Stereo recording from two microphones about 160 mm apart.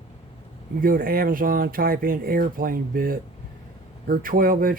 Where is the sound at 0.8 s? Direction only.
60° right (ahead or behind).